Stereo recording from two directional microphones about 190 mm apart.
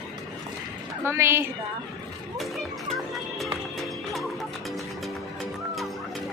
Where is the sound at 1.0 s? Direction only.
15° right (ahead or behind).